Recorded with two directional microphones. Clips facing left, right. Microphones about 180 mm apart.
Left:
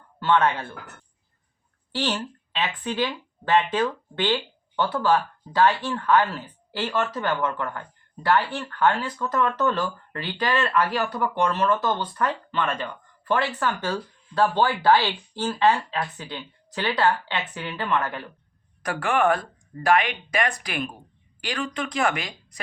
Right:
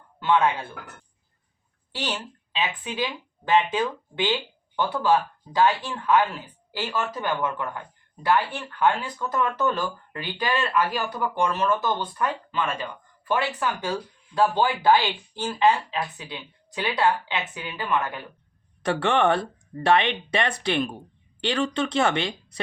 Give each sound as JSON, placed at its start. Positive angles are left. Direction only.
{"t": 0.2, "sound": "speech", "side_deg": -15}
{"t": 2.0, "sound": "speech", "side_deg": -10}
{"t": 18.8, "sound": "speech", "side_deg": -25}